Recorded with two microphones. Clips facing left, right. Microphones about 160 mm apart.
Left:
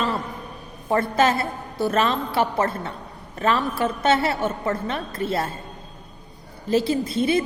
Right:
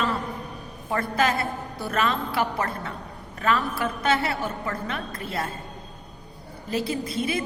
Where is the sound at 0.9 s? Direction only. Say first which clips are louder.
Left 5 dB; 30° left (ahead or behind).